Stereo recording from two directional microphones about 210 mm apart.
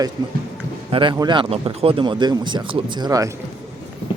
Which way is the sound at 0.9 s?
25° right (ahead or behind).